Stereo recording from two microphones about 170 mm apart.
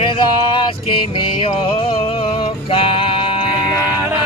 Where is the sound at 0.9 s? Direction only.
30° left (ahead or behind).